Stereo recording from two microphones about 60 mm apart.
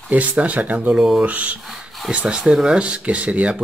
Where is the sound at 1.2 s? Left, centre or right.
Right.